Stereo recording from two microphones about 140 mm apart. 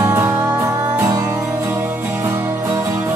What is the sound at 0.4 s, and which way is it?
Music, 20° right (ahead or behind).